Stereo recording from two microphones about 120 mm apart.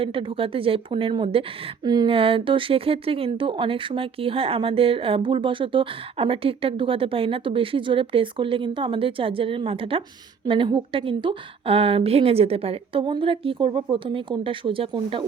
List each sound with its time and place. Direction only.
0.0 s speech: 45° right (ahead or behind)
1.9 s a sound: 35° right (ahead or behind)
2.1 s speech: 50° right (ahead or behind)